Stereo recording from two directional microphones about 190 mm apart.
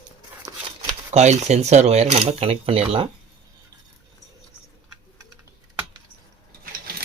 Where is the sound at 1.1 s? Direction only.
35° right (ahead or behind).